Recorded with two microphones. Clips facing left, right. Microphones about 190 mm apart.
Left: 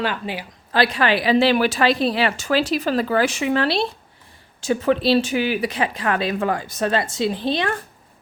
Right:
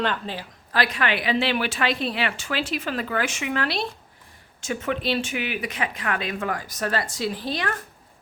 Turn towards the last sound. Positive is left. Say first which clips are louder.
# left 6 dB
turn(degrees=25)  # may be behind; listen again after turning